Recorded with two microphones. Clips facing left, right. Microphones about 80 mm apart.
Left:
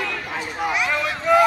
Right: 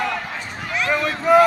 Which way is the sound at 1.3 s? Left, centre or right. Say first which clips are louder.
Right 3 dB; centre.